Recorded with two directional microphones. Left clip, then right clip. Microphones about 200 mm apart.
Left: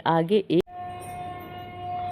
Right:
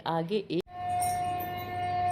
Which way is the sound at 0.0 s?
20° left (ahead or behind).